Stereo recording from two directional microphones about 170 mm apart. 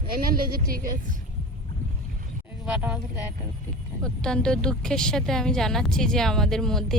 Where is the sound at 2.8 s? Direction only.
10° right (ahead or behind).